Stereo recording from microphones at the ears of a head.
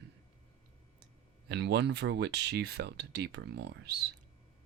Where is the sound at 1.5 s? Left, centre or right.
Right.